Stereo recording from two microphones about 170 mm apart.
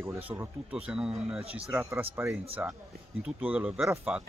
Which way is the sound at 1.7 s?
10° right (ahead or behind).